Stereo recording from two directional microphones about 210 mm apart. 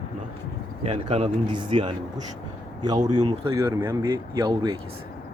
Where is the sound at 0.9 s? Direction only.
30° right (ahead or behind).